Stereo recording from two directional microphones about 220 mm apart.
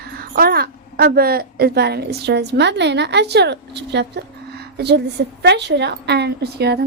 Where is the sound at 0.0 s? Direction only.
45° right (ahead or behind).